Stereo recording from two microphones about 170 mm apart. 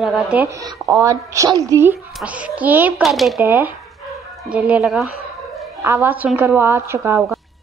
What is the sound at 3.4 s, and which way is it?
A woman's voice, 15° right (ahead or behind).